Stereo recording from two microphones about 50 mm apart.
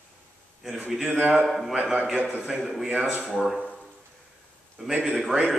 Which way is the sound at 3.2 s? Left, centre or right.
Centre.